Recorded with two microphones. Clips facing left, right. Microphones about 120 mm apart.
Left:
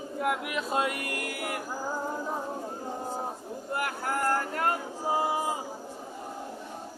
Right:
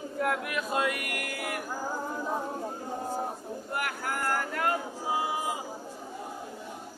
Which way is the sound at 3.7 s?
30° left (ahead or behind).